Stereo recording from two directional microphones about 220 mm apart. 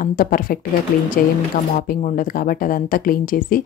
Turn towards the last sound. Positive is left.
turn(degrees=40)  # may be behind; listen again after turning